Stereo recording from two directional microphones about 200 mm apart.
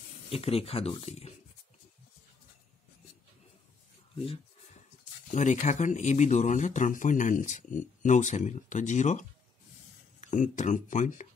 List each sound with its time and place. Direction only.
0.3 s speech: 30° left (ahead or behind)
5.3 s speech: 35° left (ahead or behind)
10.2 s speech: 40° left (ahead or behind)